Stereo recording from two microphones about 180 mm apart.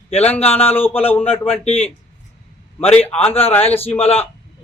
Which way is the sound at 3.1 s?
30° left (ahead or behind).